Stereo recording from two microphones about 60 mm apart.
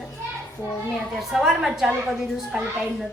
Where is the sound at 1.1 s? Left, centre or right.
Centre.